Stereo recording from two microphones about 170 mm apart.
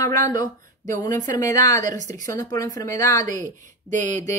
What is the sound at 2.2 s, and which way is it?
Speech, 20° left (ahead or behind).